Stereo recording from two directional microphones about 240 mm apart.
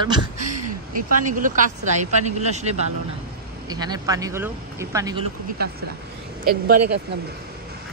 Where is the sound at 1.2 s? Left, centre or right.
Right.